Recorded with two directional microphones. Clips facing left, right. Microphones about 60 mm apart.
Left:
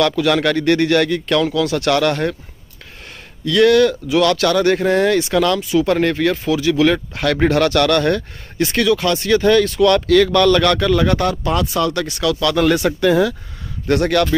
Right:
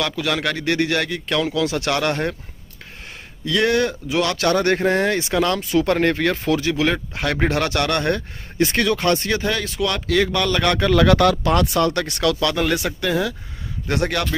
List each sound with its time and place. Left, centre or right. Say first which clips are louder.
0.0 s speech: left 7 dB; centre; by 2.3 s right
3.4 s speech: left 7 dB; right
4.6 s speech: left 3 dB; right
6.7 s speech: left 6 dB; centre
8.8 s speech: left 3 dB; right
9.4 s speech: left 9 dB; centre
11.0 s speech: right 2 dB; right
11.8 s speech: left 1 dB; right
12.5 s speech: left 6 dB; centre
13.8 s speech: left 6 dB; centre